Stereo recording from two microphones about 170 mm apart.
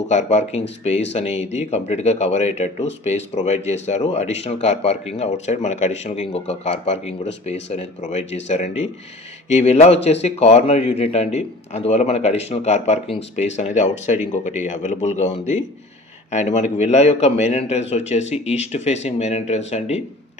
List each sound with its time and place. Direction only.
0.1 s speech: 40° left (ahead or behind)